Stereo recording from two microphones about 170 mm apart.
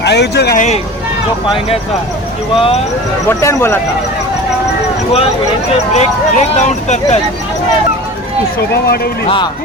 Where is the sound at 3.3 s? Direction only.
15° left (ahead or behind).